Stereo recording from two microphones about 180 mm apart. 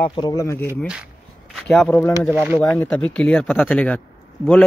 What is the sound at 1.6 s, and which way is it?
Speech, 5° left (ahead or behind).